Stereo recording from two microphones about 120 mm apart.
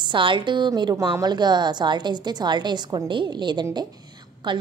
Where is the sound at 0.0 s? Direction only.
45° right (ahead or behind).